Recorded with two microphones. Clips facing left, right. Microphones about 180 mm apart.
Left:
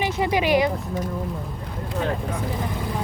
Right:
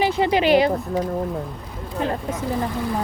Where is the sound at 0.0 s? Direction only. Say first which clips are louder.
Right 4 dB; 30° right (ahead or behind).